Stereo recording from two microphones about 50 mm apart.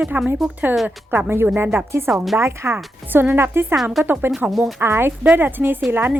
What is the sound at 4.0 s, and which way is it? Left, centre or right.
Speech, right.